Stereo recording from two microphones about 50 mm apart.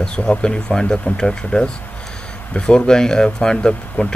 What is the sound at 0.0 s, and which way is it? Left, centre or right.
Speech, centre.